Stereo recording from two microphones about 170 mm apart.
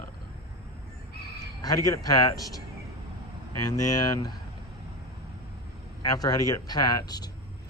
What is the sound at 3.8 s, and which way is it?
Speech, 20° left (ahead or behind).